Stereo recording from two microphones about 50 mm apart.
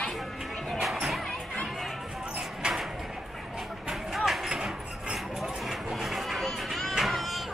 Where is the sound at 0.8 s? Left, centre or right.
Centre.